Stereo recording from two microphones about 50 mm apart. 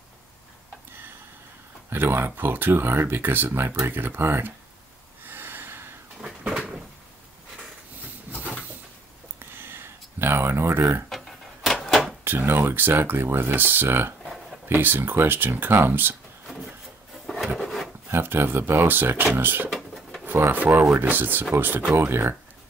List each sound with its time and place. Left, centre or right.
1.9 s speech: right
5.2 s snort: right
8.3 s a sound: right
9.6 s a sound: right
10.8 s speech: right
11.1 s a sound: centre
12.3 s speech: right
14.2 s a sound: centre
14.7 s speech: right
17.6 s wood: centre
18.0 s speech: right
21.9 s speech: right